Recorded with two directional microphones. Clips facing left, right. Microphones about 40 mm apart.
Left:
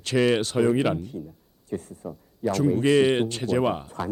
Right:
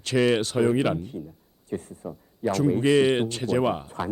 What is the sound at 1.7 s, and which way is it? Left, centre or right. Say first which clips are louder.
Speech: even; right.